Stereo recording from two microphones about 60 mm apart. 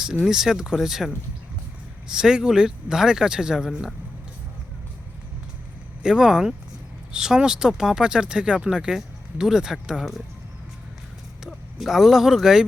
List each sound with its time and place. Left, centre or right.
0.3 s speech: centre
6.0 s speech: centre
11.8 s speech: centre